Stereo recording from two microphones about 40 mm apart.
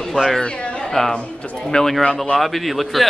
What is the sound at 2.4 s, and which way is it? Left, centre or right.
Speech, centre.